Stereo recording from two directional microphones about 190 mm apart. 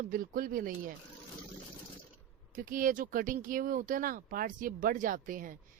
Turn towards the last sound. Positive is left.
turn(degrees=-45)  # may be behind; listen again after turning